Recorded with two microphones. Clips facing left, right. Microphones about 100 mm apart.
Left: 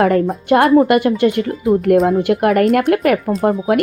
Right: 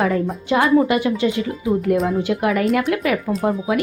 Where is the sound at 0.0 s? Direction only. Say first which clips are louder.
Left 6 dB; 65° left (ahead or behind).